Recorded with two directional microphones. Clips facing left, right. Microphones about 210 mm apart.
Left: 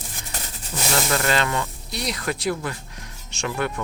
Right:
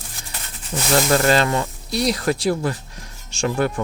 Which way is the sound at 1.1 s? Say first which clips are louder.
Right 6 dB; 35° right (ahead or behind).